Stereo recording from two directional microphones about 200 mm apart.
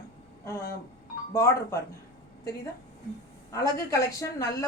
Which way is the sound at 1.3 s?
15° left (ahead or behind).